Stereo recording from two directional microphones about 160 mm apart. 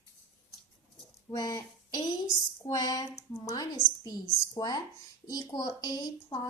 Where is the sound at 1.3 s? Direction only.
25° left (ahead or behind).